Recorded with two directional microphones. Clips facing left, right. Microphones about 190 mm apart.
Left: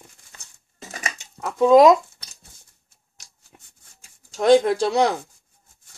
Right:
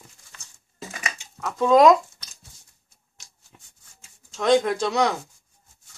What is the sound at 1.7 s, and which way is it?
Speech, 25° left (ahead or behind).